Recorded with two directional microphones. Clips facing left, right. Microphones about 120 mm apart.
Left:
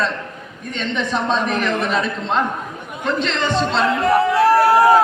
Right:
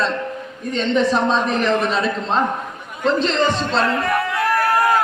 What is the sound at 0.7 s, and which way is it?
A man's voice, 35° right (ahead or behind).